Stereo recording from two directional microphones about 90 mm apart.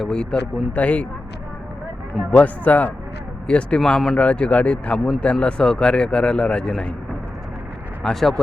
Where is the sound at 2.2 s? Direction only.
15° left (ahead or behind).